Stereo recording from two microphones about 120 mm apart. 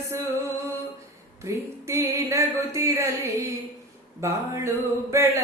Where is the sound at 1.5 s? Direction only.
25° right (ahead or behind).